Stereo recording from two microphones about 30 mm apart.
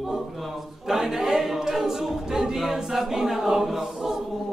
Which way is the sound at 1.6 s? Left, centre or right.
Centre.